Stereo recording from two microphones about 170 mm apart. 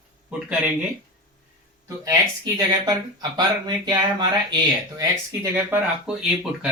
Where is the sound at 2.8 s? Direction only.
25° right (ahead or behind).